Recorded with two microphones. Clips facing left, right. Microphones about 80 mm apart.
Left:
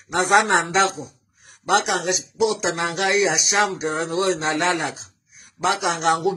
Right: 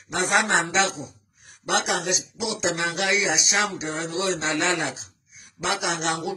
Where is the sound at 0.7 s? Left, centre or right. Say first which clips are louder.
Left 4 dB; left.